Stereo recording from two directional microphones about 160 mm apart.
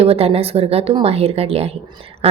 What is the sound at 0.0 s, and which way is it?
A woman's voice, 40° right (ahead or behind).